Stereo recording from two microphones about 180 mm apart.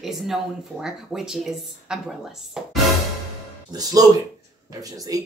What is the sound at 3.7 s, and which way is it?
Speech, 20° right (ahead or behind).